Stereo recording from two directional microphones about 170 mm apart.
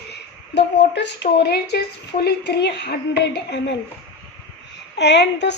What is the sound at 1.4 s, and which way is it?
A woman's voice, 75° left (ahead or behind).